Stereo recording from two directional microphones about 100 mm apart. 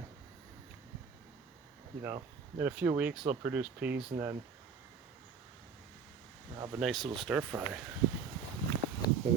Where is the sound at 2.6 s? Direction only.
20° right (ahead or behind).